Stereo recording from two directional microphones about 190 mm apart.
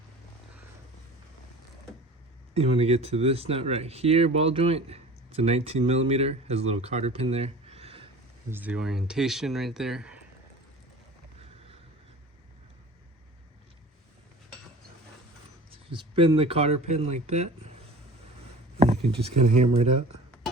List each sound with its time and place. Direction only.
2.6 s speech: 30° right (ahead or behind)
8.4 s speech: 10° right (ahead or behind)
15.7 s speech: 30° right (ahead or behind)
18.8 s speech: 30° right (ahead or behind)